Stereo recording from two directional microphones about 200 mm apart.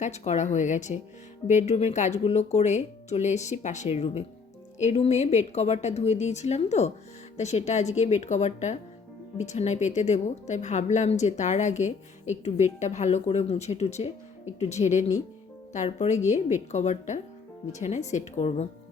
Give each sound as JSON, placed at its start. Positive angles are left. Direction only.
{"t": 0.0, "sound": "a woman's voice", "side_deg": 35}